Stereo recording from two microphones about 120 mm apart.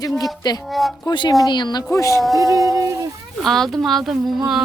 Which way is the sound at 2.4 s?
30° right (ahead or behind).